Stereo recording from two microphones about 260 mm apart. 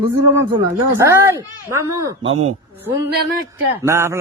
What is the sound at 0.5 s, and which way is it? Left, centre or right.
A man's voice, centre.